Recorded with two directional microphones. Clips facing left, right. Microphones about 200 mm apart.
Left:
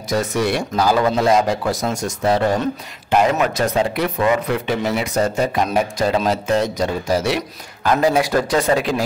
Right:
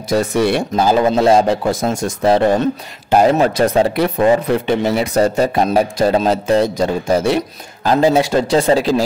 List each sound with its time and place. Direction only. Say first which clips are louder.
0.1 s a man's voice: right 4 dB; 30° right (ahead or behind)